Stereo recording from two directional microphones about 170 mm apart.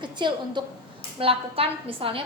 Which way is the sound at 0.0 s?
25° right (ahead or behind).